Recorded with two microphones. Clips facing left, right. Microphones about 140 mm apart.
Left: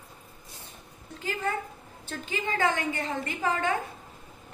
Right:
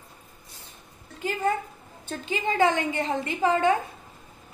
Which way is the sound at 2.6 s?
20° right (ahead or behind).